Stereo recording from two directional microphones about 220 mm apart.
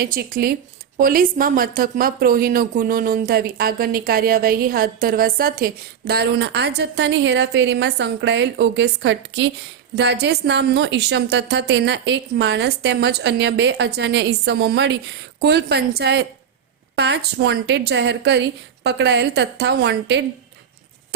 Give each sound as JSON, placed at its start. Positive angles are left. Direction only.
{"t": 0.0, "sound": "a woman's voice", "side_deg": -40}